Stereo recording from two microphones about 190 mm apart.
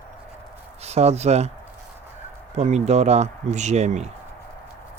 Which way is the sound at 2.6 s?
35° right (ahead or behind).